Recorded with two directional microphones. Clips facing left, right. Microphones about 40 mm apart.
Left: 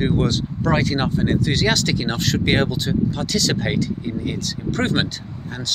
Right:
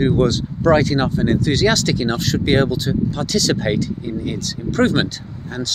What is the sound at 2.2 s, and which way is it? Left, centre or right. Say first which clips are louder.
Speech: right 1 dB; left.